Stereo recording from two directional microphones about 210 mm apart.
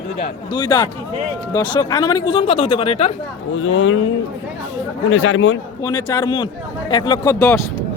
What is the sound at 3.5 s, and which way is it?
Speech, 75° left (ahead or behind).